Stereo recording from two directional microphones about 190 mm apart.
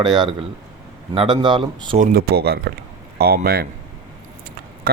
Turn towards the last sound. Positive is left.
turn(degrees=-55)  # may be behind; listen again after turning